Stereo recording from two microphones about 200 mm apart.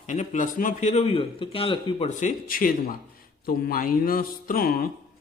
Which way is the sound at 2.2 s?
40° left (ahead or behind).